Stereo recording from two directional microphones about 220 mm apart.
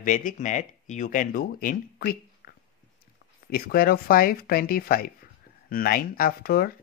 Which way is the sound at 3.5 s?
45° left (ahead or behind).